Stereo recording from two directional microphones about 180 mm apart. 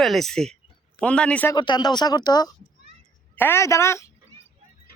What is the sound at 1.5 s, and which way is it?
Speech, 25° left (ahead or behind).